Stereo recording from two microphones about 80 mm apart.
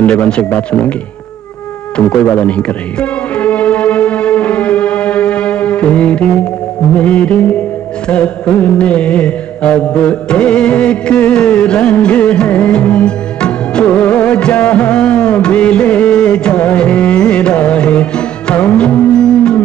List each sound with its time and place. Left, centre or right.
0.0 s speech: centre
2.0 s music: centre
7.0 s speech: centre
8.1 s music: centre